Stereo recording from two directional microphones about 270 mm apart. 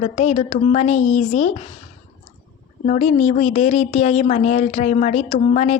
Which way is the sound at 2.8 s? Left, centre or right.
Left.